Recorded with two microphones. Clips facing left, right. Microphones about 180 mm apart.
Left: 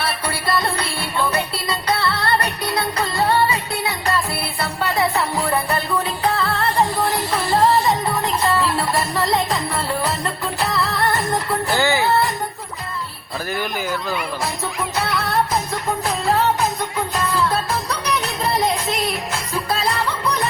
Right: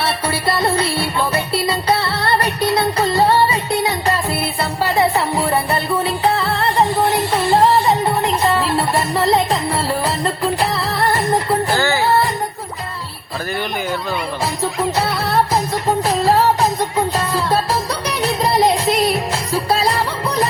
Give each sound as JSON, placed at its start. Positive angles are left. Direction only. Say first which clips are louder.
{"t": 0.0, "sound": "music", "louder": "right 4 dB", "side_deg": -30}
{"t": 11.8, "sound": "music", "louder": "right 1 dB", "side_deg": 15}
{"t": 14.8, "sound": "music", "louder": "right 4 dB", "side_deg": -30}
{"t": 19.7, "sound": "music", "louder": "right 3 dB", "side_deg": -30}